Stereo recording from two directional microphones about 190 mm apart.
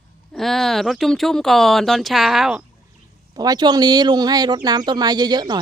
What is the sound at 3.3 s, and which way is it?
Speech, 20° right (ahead or behind).